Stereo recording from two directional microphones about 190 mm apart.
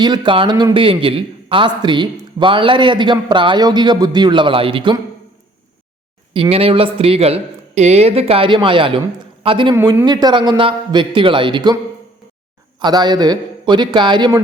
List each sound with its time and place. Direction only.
0.0 s a man's voice: 20° right (ahead or behind)
6.3 s a man's voice: 30° right (ahead or behind)
12.8 s a man's voice: 20° right (ahead or behind)